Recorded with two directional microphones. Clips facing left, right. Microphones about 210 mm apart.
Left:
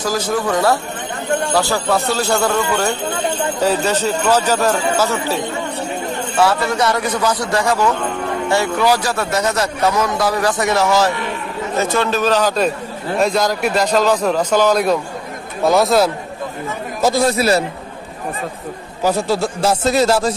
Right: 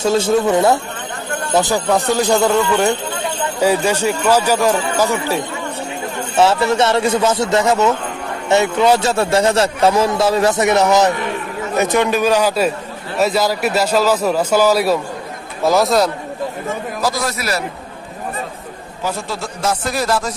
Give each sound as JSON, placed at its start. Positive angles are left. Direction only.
{"t": 0.0, "sound": "a man's voice", "side_deg": -25}
{"t": 6.3, "sound": "a man's voice", "side_deg": -25}
{"t": 17.0, "sound": "speech", "side_deg": 30}
{"t": 19.0, "sound": "speech", "side_deg": 35}